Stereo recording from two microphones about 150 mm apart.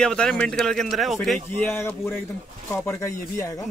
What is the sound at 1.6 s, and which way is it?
Speech, 15° left (ahead or behind).